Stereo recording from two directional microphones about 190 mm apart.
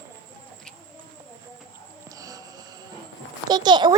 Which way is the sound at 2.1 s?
20° right (ahead or behind).